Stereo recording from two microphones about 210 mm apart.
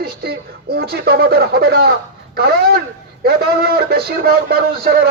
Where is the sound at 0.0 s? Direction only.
45° right (ahead or behind).